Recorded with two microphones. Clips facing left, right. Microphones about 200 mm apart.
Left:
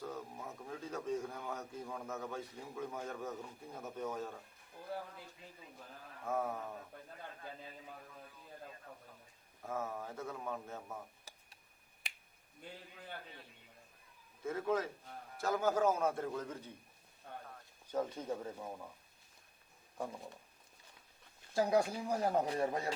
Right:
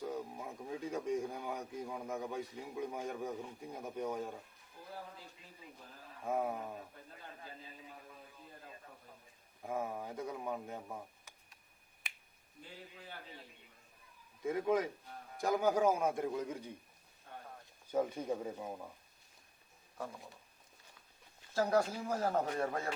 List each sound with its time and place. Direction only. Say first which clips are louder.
0.0 s speech: right 3 dB; 10° right (ahead or behind)
6.2 s speech: right 2 dB; 15° right (ahead or behind)
9.6 s speech: right 2 dB; 15° right (ahead or behind)
11.3 s a sound: left 3 dB; 35° left (ahead or behind)
14.4 s speech: right 3 dB; 15° right (ahead or behind)
17.9 s speech: right 3 dB; 10° right (ahead or behind)
21.5 s speech: even; 15° left (ahead or behind)